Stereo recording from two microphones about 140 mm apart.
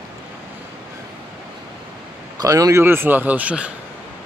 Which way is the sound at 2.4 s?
25° right (ahead or behind).